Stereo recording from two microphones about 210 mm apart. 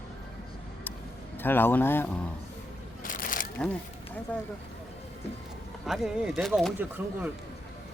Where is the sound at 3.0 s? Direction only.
40° left (ahead or behind).